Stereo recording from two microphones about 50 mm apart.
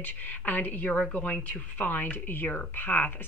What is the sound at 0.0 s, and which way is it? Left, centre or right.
A woman's voice, left.